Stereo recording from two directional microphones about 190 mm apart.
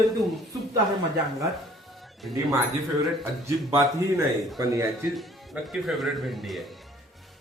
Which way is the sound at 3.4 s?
15° right (ahead or behind).